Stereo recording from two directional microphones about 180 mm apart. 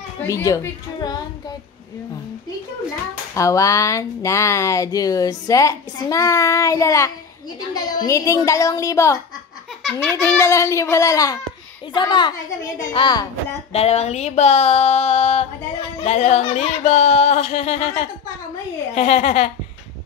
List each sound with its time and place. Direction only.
0.3 s speech: 15° left (ahead or behind)
3.3 s a woman's voice: 15° left (ahead or behind)
13.7 s speech: 35° left (ahead or behind)